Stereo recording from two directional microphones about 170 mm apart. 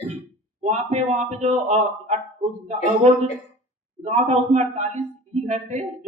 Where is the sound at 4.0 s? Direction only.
40° right (ahead or behind).